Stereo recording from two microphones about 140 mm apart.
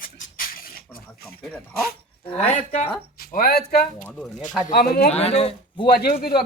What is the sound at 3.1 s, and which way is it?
Speech, 90° left.